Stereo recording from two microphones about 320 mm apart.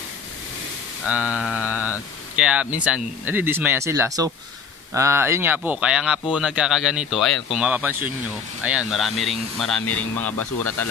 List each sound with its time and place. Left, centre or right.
1.0 s speech: centre